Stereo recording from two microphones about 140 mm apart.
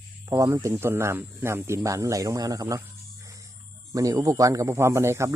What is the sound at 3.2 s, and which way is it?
Music, 20° right (ahead or behind).